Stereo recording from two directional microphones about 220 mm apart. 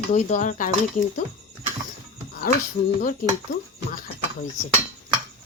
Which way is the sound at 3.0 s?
40° left (ahead or behind).